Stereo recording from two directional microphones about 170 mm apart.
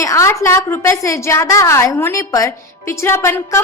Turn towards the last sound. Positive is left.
turn(degrees=15)  # may be behind; listen again after turning